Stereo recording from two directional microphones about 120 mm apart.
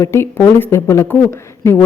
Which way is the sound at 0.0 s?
20° left (ahead or behind).